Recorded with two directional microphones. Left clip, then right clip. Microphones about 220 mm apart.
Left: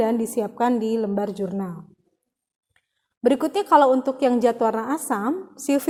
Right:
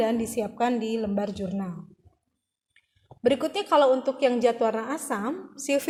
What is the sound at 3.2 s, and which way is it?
A woman's voice, 40° left (ahead or behind).